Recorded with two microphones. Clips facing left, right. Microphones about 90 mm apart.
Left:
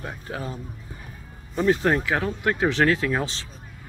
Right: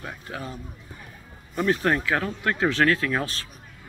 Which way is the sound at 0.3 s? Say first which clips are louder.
Left 3 dB; 30° left (ahead or behind).